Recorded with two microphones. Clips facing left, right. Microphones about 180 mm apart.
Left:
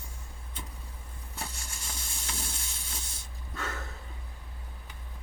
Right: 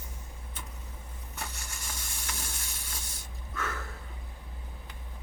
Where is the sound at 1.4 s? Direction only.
30° left (ahead or behind).